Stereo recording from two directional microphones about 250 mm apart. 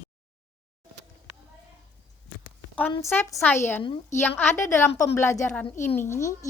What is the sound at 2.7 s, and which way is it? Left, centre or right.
A woman's voice, centre.